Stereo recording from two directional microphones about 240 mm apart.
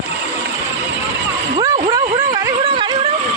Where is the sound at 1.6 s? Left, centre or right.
Centre.